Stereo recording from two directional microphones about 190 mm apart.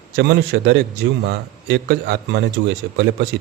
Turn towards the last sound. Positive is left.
turn(degrees=-65)  # may be behind; listen again after turning